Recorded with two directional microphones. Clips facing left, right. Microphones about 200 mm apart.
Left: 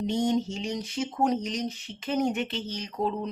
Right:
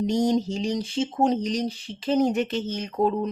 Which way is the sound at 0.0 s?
40° right (ahead or behind).